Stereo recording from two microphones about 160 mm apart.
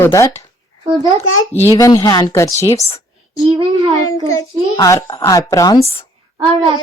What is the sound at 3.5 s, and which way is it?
Speech, 35° right (ahead or behind).